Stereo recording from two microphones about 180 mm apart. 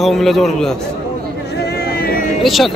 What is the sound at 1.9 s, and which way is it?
Vehicle, 55° left (ahead or behind).